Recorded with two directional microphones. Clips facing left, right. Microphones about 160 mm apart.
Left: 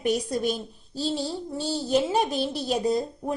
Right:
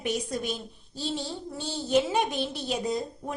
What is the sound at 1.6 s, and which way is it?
Speech, 35° left (ahead or behind).